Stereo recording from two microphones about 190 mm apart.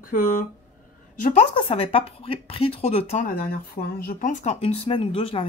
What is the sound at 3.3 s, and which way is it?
Speech, 50° left (ahead or behind).